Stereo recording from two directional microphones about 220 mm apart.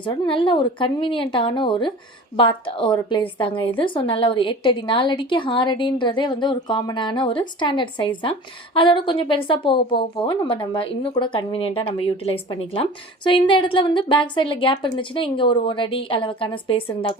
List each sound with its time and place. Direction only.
0.0 s a woman's voice: 20° left (ahead or behind)